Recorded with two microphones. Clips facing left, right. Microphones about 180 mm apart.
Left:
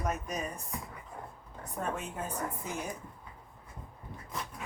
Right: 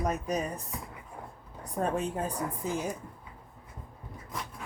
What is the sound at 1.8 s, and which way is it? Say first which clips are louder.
Speech: right 6 dB; 35° right (ahead or behind).